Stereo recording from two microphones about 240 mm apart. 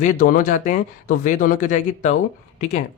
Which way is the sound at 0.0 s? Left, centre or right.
Left.